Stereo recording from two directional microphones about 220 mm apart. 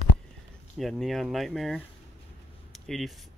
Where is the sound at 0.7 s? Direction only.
Centre (ahead or behind).